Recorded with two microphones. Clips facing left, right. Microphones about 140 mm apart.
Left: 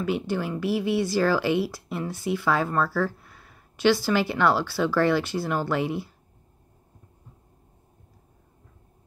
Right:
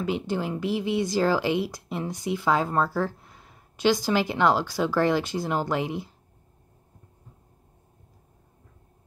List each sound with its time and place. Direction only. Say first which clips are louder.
0.0 s speech: left 1 dB; 20° right (ahead or behind)